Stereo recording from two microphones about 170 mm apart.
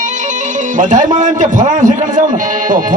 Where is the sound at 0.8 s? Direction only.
50° right (ahead or behind).